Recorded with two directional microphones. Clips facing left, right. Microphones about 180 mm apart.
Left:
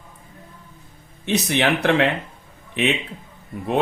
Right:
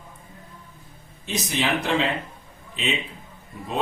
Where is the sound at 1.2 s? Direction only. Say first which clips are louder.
Left 6 dB; 65° left (ahead or behind).